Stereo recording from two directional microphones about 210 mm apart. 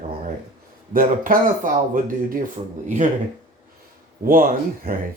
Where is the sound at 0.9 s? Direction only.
40° right (ahead or behind).